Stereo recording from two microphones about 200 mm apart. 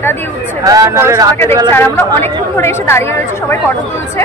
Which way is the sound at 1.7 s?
10° left (ahead or behind).